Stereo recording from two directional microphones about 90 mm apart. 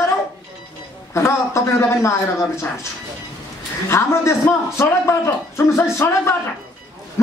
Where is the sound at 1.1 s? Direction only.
30° left (ahead or behind).